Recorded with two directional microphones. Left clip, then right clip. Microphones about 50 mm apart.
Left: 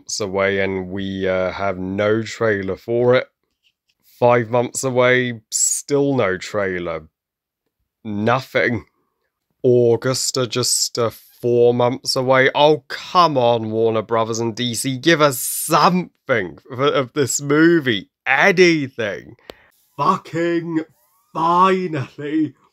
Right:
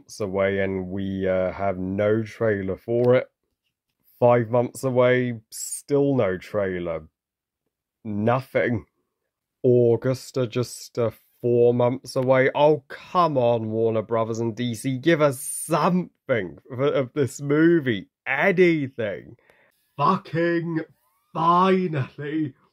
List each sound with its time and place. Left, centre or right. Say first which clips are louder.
0.0 s speech: left 4 dB; centre
4.2 s speech: left 3 dB; centre
9.6 s speech: left 4 dB; centre
18.9 s speech: left 4 dB; centre
20.4 s speech: left 5 dB; left